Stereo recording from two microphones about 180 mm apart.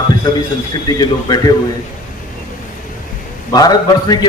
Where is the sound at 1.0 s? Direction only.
20° left (ahead or behind).